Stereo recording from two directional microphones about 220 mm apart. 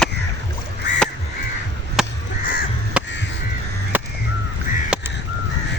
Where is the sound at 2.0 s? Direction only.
Centre (ahead or behind).